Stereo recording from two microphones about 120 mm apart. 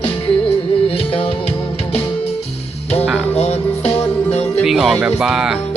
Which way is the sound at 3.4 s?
60° left (ahead or behind).